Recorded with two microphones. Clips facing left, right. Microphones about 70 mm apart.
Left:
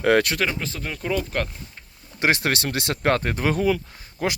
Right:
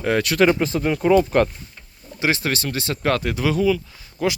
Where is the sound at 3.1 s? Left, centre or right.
Left.